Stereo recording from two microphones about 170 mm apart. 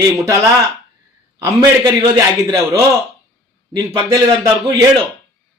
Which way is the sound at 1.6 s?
20° right (ahead or behind).